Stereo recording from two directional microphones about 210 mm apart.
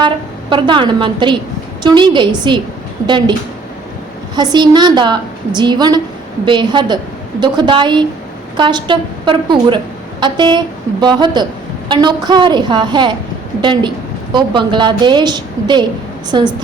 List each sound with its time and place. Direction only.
0.5 s a woman's voice: 20° right (ahead or behind)
4.4 s a woman's voice: 20° right (ahead or behind)